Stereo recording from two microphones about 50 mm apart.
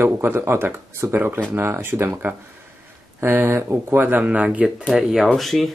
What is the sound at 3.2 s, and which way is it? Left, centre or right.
Speech, right.